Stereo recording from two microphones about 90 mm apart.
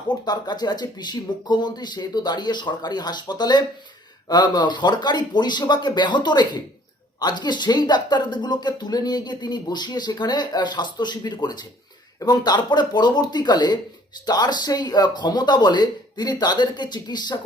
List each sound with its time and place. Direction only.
0.3 s speech: 50° left (ahead or behind)